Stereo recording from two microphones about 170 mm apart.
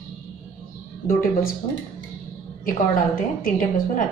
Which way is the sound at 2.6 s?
55° left (ahead or behind).